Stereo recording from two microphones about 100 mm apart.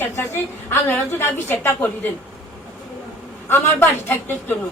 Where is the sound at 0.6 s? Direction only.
20° left (ahead or behind).